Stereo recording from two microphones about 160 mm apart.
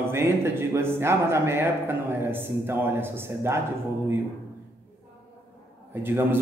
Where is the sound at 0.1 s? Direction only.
15° right (ahead or behind).